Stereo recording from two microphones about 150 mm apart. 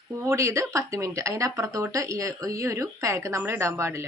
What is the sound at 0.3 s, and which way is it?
Speech, 20° right (ahead or behind).